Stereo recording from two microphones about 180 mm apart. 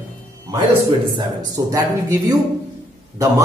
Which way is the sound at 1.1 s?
20° right (ahead or behind).